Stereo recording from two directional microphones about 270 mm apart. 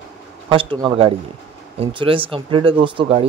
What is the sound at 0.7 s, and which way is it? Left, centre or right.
Speech, centre.